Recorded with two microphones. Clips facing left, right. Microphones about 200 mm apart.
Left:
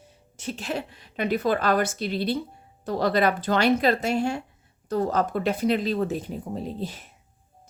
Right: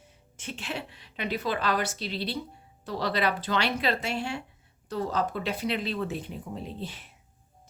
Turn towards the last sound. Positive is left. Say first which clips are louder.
# left 6 dB
turn(degrees=40)  # may be behind; listen again after turning